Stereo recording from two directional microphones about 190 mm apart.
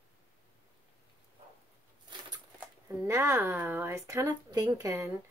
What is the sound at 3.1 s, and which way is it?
Speech, 15° right (ahead or behind).